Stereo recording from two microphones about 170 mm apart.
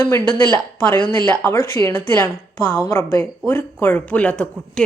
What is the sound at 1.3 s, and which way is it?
A woman's voice, 10° left (ahead or behind).